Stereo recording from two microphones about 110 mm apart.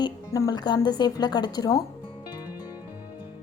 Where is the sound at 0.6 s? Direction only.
40° left (ahead or behind).